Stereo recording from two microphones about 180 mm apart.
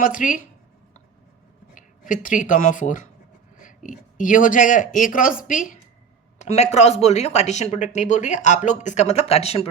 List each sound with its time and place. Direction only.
0.0 s speech: 45° left (ahead or behind)
1.7 s speech: 45° left (ahead or behind)